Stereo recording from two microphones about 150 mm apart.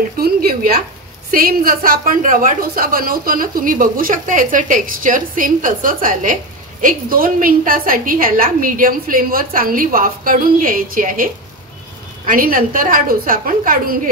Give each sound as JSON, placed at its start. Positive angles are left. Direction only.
{"t": 0.2, "sound": "a woman's voice", "side_deg": -85}
{"t": 12.3, "sound": "a woman's voice", "side_deg": -70}